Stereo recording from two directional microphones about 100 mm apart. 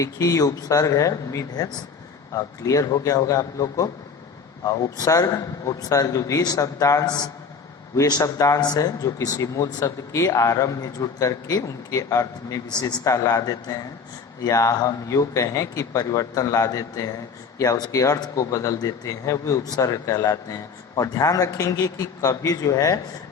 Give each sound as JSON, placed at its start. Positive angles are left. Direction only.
{"t": 0.0, "sound": "a man's voice", "side_deg": 35}